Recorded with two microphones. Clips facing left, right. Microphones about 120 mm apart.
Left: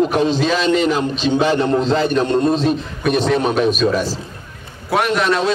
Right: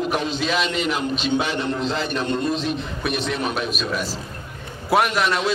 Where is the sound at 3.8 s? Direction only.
35° left (ahead or behind).